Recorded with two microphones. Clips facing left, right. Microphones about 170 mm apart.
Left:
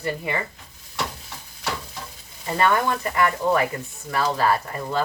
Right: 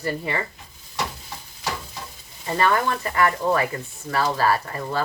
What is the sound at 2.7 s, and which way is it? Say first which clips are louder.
Speech: even; 20° left (ahead or behind).